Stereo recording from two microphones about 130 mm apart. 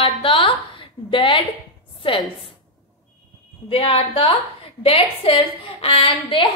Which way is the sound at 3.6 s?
45° left (ahead or behind).